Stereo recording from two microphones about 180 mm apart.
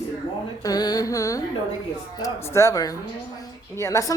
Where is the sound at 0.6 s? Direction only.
20° left (ahead or behind).